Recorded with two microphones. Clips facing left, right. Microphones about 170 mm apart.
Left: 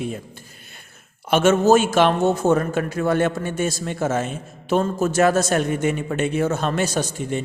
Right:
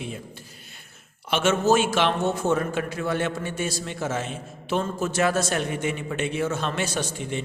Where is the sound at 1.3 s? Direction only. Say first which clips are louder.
Left 6 dB; 45° left (ahead or behind).